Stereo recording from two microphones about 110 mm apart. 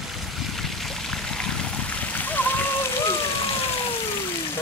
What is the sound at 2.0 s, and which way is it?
Splash, 15° left (ahead or behind).